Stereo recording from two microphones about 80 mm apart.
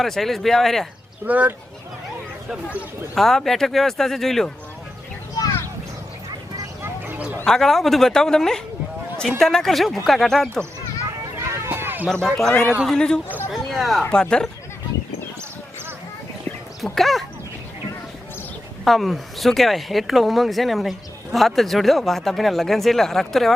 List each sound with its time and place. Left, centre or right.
0.0 s speech: centre
1.2 s speech: centre
3.2 s speech: centre
6.8 s a sound: right
7.4 s speech: centre
11.3 s run: right
11.7 s run: right
12.0 s speech: centre
13.5 s a sound: centre
14.0 s speech: centre
16.8 s speech: centre
18.9 s speech: centre